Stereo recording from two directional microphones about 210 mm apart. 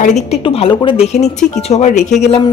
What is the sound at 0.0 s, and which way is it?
A woman's voice, 30° left (ahead or behind).